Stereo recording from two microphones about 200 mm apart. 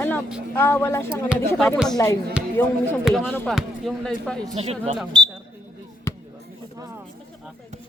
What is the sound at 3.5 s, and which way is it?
Speech, centre (ahead or behind).